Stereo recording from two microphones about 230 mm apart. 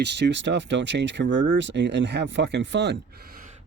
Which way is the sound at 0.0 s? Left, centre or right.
Right.